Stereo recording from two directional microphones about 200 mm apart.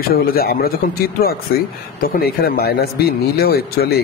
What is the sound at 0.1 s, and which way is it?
A man's voice, 50° left (ahead or behind).